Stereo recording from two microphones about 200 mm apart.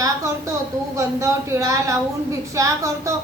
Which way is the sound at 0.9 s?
15° right (ahead or behind).